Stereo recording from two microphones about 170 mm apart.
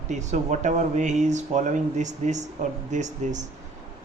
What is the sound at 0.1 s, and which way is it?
Speech, 45° right (ahead or behind).